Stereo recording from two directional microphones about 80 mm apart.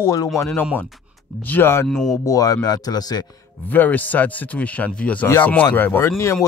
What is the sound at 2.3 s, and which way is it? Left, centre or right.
Speech, left.